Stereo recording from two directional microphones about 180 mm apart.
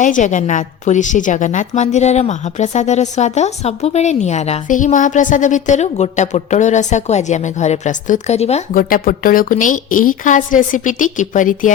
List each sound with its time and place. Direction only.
0.0 s a woman's voice: 45° left (ahead or behind)
8.7 s a woman's voice: 50° left (ahead or behind)